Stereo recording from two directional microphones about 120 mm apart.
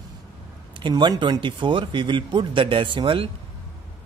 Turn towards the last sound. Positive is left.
turn(degrees=-45)  # may be behind; listen again after turning